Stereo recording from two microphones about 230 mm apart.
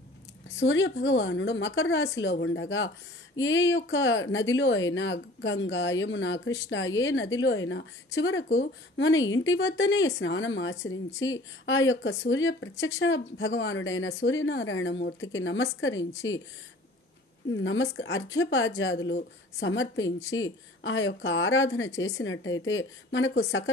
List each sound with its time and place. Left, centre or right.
0.6 s a woman's voice: left
17.5 s speech: left
20.1 s speech: centre
20.3 s speech: left
21.9 s speech: centre
22.2 s speech: left